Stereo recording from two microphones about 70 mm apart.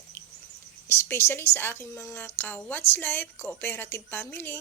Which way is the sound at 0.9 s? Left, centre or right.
Left.